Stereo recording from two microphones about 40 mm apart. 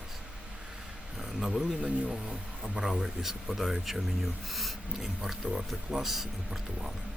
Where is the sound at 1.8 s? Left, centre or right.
Centre.